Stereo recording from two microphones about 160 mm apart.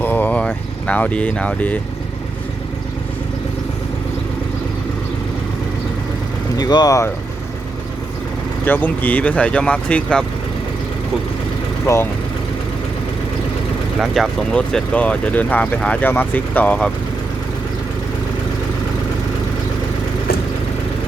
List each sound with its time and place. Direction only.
0.0 s speech: 10° left (ahead or behind)
6.6 s speech: 25° left (ahead or behind)
8.6 s speech: 10° left (ahead or behind)
11.9 s speech: 20° left (ahead or behind)
14.0 s speech: centre (ahead or behind)